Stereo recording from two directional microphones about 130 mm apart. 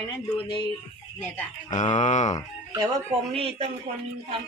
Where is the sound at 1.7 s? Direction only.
70° left (ahead or behind).